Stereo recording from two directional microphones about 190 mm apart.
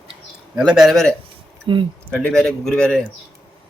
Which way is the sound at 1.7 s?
25° right (ahead or behind).